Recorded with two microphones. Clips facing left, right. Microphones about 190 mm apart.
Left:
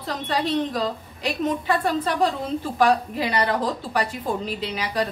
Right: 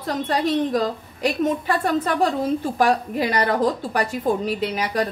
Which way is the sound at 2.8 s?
45° right (ahead or behind).